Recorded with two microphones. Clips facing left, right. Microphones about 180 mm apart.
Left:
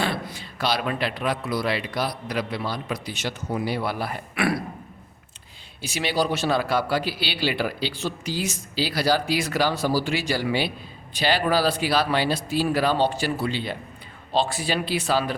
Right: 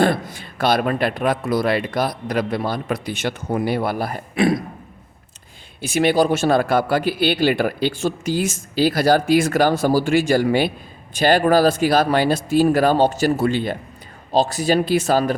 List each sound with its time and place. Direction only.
0.0 s a man's voice: 50° right (ahead or behind)
4.4 s a sound: 20° right (ahead or behind)
5.8 s a man's voice: 50° right (ahead or behind)